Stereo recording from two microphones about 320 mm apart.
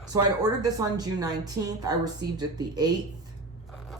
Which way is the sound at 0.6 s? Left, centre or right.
Centre.